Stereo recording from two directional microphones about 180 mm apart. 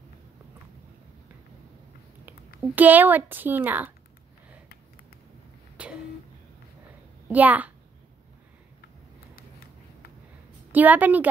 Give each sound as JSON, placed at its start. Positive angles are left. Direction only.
{"t": 2.2, "sound": "speech", "side_deg": -10}
{"t": 5.8, "sound": "a sound", "side_deg": -5}
{"t": 7.2, "sound": "a child's voice", "side_deg": -10}
{"t": 10.7, "sound": "a woman's voice", "side_deg": -10}